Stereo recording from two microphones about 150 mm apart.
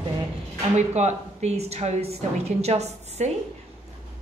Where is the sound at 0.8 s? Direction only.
50° right (ahead or behind).